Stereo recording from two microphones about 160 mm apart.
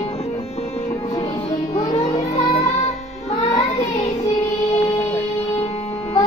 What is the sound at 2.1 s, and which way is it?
Music, 40° left (ahead or behind).